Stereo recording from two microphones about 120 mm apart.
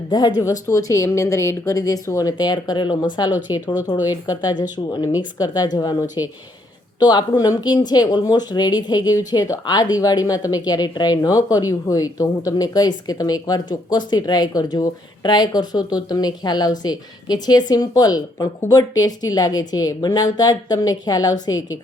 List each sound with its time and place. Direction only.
0.1 s speech: 35° left (ahead or behind)